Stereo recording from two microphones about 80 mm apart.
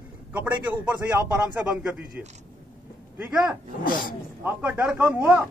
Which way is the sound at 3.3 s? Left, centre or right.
Centre.